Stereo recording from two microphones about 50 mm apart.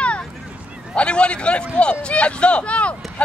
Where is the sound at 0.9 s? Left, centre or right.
Left.